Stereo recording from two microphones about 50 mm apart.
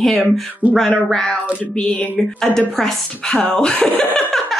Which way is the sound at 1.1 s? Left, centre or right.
Centre.